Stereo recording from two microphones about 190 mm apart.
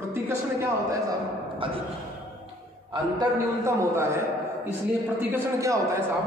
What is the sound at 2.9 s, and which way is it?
A man's voice, 15° right (ahead or behind).